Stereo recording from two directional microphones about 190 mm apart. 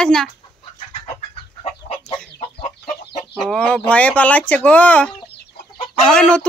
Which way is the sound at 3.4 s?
5° left (ahead or behind).